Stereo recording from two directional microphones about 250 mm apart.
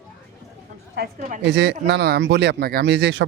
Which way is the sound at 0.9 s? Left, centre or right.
Right.